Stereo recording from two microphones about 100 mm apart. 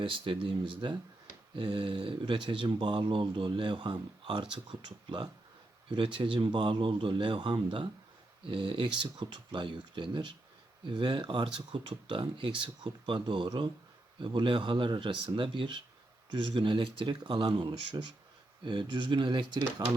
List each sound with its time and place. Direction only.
0.0 s speech: 60° right (ahead or behind)
9.0 s speech: 45° right (ahead or behind)